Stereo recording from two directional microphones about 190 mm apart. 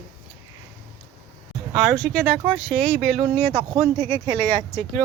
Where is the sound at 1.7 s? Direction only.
Centre (ahead or behind).